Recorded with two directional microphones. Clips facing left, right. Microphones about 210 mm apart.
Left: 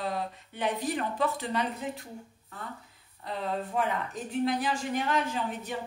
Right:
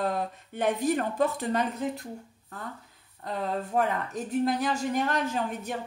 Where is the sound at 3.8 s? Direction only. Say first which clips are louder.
Right 6 dB; 45° right (ahead or behind).